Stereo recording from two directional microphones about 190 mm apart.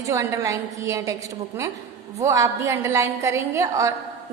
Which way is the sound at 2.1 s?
15° right (ahead or behind).